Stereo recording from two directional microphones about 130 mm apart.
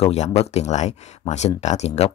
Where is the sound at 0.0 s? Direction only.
55° left (ahead or behind).